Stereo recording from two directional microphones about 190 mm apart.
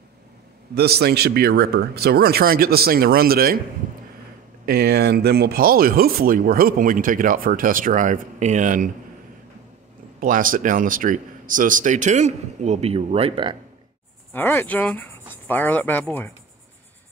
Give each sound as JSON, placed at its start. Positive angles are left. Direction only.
{"t": 0.7, "sound": "speech", "side_deg": -55}
{"t": 4.6, "sound": "speech", "side_deg": -55}
{"t": 10.2, "sound": "speech", "side_deg": -45}
{"t": 14.3, "sound": "speech", "side_deg": 10}